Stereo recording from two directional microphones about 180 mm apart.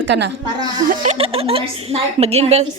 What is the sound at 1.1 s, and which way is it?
A woman's voice, 30° right (ahead or behind).